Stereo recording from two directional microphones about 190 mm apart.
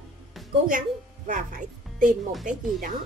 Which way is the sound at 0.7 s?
45° right (ahead or behind).